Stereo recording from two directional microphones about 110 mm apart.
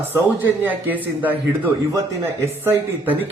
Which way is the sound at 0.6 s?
15° right (ahead or behind).